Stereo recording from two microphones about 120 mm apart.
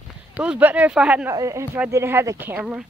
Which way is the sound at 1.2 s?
25° right (ahead or behind).